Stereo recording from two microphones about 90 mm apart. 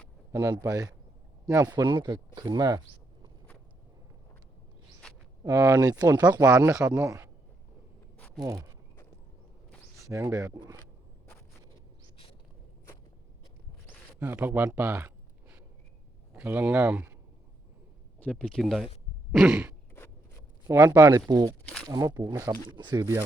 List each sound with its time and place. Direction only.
0.6 s speech: 40° right (ahead or behind)
1.7 s speech: 60° right (ahead or behind)
5.0 s a sound: 10° left (ahead or behind)
5.5 s speech: 35° right (ahead or behind)
8.4 s speech: 40° right (ahead or behind)
10.0 s speech: 35° right (ahead or behind)
14.2 s speech: 20° right (ahead or behind)
18.2 s speech: 10° left (ahead or behind)
19.3 s a sound: centre (ahead or behind)
20.7 s speech: 35° right (ahead or behind)
21.0 s speech: 45° right (ahead or behind)